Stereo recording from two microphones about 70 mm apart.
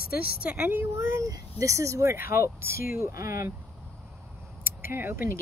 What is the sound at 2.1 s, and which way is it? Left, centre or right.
Speech, right.